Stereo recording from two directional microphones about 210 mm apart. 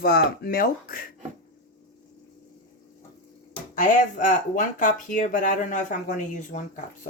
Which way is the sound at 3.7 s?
40° left (ahead or behind).